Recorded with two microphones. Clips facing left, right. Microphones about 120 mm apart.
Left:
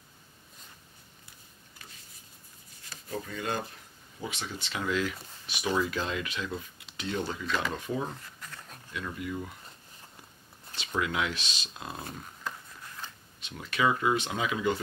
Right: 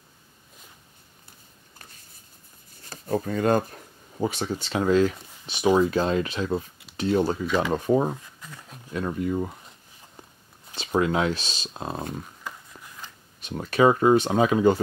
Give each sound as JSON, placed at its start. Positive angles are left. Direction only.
{"t": 2.8, "sound": "speech", "side_deg": -45}
{"t": 7.4, "sound": "speech", "side_deg": -10}
{"t": 7.7, "sound": "speech", "side_deg": -40}
{"t": 8.1, "sound": "a sound", "side_deg": -10}
{"t": 8.9, "sound": "speech", "side_deg": -40}
{"t": 10.8, "sound": "speech", "side_deg": -35}
{"t": 12.4, "sound": "a sound", "side_deg": -10}
{"t": 13.4, "sound": "speech", "side_deg": -45}